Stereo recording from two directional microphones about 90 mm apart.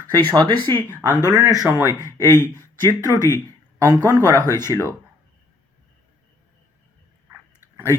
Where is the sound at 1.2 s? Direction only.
45° right (ahead or behind).